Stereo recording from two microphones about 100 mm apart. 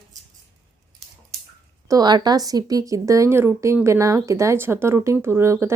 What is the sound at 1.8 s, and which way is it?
A woman's voice, 45° right (ahead or behind).